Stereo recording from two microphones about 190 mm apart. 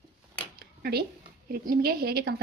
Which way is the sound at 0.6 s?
55° right (ahead or behind).